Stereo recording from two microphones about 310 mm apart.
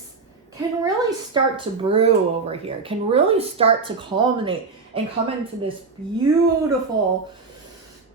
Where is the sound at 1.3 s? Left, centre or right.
Centre.